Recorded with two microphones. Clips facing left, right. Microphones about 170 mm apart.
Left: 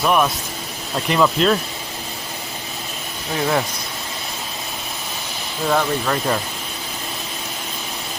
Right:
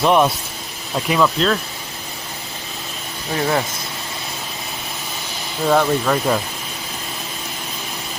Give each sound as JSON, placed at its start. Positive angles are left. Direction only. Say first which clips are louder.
{"t": 0.0, "sound": "speech", "louder": "right 3 dB", "side_deg": -25}
{"t": 1.0, "sound": "speech", "louder": "left 1 dB", "side_deg": 0}
{"t": 3.3, "sound": "speech", "louder": "right 1 dB", "side_deg": 0}
{"t": 5.6, "sound": "speech", "louder": "right 3 dB", "side_deg": -5}